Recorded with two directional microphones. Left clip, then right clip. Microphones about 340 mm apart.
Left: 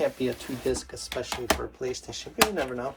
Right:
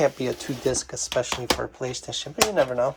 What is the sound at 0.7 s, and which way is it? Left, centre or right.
Speech, right.